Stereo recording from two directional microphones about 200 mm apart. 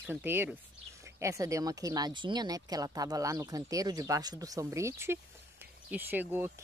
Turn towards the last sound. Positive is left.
turn(degrees=-10)  # may be behind; listen again after turning